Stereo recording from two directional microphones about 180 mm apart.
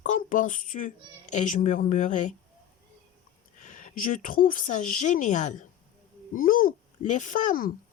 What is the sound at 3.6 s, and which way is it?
A woman's voice, 45° left (ahead or behind).